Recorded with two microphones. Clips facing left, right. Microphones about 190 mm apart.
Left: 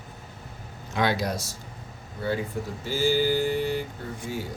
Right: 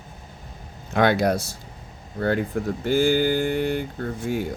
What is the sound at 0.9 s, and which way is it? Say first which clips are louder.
Speech: right 6 dB; 55° right (ahead or behind).